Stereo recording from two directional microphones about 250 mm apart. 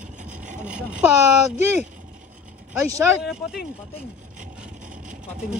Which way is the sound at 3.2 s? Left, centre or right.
Centre.